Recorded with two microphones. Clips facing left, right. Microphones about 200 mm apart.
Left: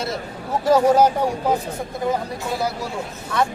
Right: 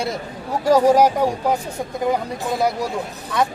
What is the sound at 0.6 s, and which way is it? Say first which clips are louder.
Speech: right 1 dB; 10° right (ahead or behind).